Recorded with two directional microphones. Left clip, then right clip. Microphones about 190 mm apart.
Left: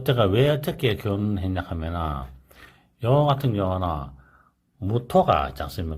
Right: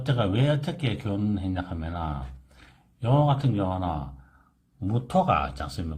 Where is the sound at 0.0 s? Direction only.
35° left (ahead or behind).